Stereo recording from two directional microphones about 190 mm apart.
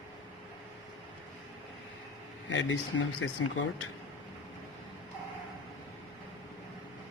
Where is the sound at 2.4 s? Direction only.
90° left.